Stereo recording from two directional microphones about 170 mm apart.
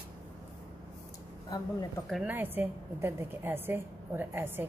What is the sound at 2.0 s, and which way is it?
Speech, centre (ahead or behind).